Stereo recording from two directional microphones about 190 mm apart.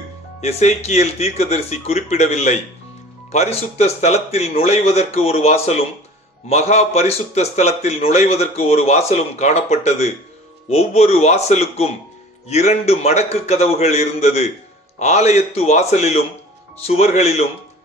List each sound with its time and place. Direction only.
0.4 s a man's voice: 35° left (ahead or behind)